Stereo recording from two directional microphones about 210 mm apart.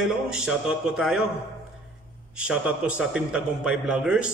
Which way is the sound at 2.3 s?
5° right (ahead or behind).